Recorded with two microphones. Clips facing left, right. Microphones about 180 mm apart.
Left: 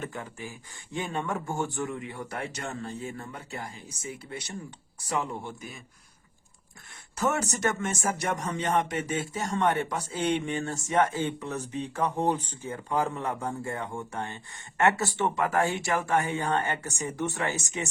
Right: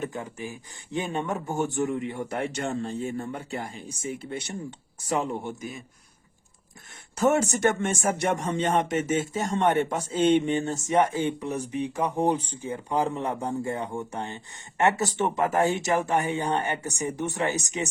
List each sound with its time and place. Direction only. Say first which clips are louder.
0.0 s speech: right 4 dB; 20° right (ahead or behind)
7.2 s speech: right 6 dB; 25° right (ahead or behind)